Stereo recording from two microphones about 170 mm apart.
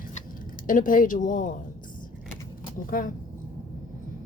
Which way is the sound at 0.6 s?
50° left (ahead or behind).